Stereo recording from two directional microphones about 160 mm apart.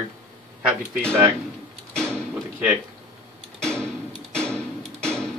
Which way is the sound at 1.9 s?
5° left (ahead or behind).